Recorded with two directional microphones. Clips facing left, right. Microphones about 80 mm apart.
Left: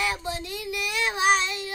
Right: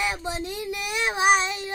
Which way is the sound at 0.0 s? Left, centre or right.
Right.